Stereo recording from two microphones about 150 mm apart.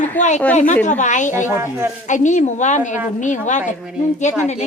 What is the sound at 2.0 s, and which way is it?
Speech, 55° left (ahead or behind).